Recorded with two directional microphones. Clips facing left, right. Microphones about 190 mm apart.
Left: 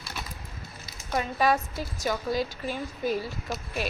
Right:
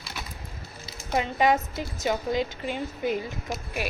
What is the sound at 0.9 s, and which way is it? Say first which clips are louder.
A woman's voice: right 2 dB; 20° right (ahead or behind).